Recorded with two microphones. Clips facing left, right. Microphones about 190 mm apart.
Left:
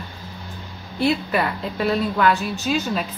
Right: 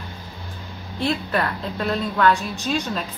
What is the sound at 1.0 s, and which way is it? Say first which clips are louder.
A woman's voice: left 3 dB; 5° left (ahead or behind).